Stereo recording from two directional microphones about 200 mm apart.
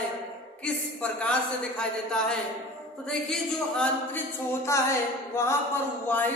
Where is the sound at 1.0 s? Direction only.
5° left (ahead or behind).